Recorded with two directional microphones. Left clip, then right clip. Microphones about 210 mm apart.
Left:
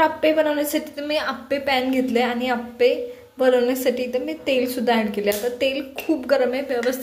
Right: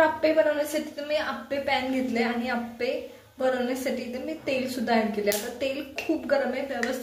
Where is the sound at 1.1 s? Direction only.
45° left (ahead or behind).